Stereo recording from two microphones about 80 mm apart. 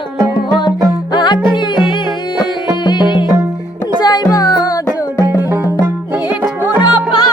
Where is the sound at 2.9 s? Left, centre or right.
Left.